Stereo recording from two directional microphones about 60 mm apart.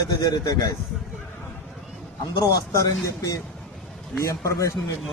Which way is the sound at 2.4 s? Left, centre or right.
Left.